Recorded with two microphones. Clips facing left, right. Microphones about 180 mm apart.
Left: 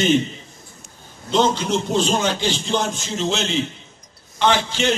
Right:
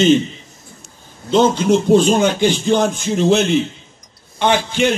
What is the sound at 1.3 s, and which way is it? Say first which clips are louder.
Speech: right 6 dB; 55° right (ahead or behind).